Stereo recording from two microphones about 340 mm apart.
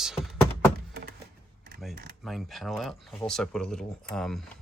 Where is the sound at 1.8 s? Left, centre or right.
Centre.